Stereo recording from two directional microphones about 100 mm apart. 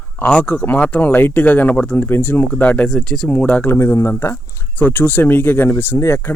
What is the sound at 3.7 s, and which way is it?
Speech, 30° left (ahead or behind).